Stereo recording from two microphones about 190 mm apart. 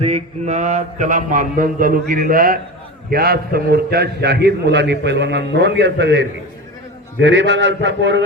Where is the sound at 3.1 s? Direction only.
55° right (ahead or behind).